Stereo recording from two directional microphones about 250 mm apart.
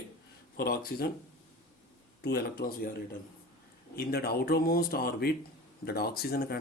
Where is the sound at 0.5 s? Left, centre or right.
Left.